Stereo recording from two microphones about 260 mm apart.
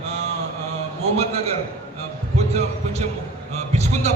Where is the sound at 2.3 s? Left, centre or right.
Right.